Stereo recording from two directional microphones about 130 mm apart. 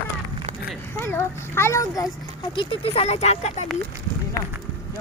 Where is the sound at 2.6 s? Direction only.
45° left (ahead or behind).